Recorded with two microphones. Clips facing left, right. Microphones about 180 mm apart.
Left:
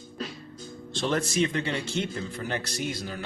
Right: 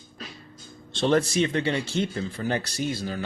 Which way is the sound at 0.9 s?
30° right (ahead or behind).